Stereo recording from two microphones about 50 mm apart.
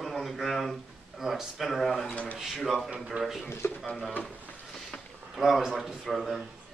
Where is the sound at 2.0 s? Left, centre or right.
Left.